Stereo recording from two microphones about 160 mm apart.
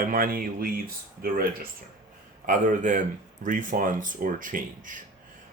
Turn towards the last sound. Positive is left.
turn(degrees=-55)  # may be behind; listen again after turning